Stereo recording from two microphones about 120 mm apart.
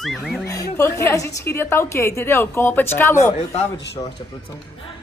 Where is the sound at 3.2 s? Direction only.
75° left (ahead or behind).